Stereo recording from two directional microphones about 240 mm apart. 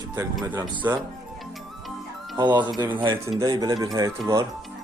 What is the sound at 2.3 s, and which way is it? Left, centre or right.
Speech, centre.